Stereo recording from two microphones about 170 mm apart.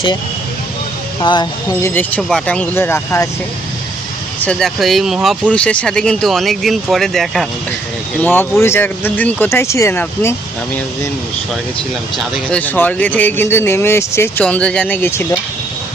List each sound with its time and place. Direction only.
1.2 s speech: 25° left (ahead or behind)
1.8 s speech: 10° left (ahead or behind)
4.4 s speech: centre (ahead or behind)
8.2 s speech: 10° left (ahead or behind)
12.1 s speech: 5° left (ahead or behind)